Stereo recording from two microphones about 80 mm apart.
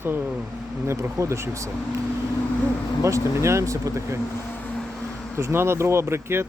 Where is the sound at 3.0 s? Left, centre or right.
Right.